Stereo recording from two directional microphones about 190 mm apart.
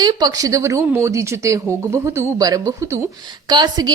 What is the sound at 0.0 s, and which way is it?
Speech, 20° right (ahead or behind).